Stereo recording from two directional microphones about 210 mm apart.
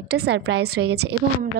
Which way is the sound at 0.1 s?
50° right (ahead or behind).